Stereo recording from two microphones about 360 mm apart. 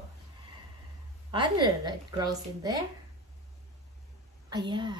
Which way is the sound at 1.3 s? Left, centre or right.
Centre.